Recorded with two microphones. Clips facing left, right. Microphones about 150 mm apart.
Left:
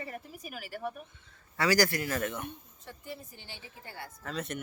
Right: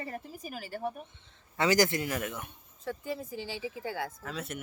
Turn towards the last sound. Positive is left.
turn(degrees=-5)  # may be behind; listen again after turning